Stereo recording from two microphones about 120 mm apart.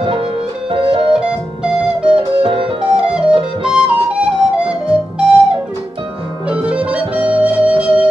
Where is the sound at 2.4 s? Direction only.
45° right (ahead or behind).